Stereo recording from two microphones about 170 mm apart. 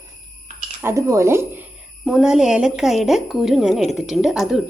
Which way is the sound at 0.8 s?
15° right (ahead or behind).